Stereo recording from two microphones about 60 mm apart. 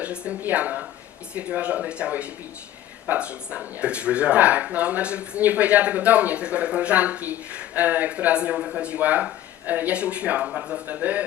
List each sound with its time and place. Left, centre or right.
0.0 s speech: right